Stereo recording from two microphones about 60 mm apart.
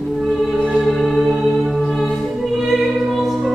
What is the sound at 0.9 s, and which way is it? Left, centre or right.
Music, centre.